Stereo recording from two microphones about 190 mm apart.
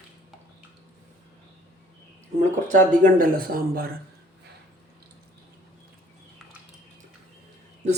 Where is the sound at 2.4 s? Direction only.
40° right (ahead or behind).